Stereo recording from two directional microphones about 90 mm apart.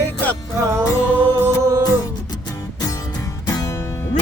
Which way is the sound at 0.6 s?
35° right (ahead or behind).